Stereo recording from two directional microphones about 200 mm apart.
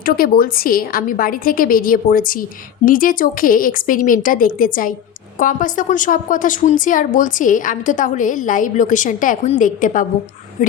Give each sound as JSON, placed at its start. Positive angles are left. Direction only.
{"t": 0.0, "sound": "a woman's voice", "side_deg": 45}